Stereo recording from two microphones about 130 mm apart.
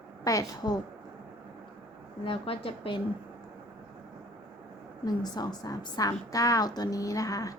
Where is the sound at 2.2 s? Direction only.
45° left (ahead or behind).